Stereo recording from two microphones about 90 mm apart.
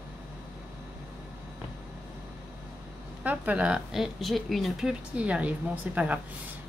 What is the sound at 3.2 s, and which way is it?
Speech, 15° right (ahead or behind).